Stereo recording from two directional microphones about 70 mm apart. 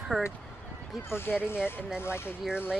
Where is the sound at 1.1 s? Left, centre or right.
Left.